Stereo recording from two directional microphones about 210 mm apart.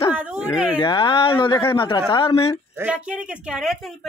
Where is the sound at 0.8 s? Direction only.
25° left (ahead or behind).